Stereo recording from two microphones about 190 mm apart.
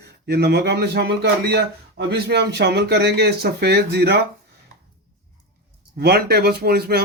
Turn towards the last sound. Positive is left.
turn(degrees=-55)  # may be behind; listen again after turning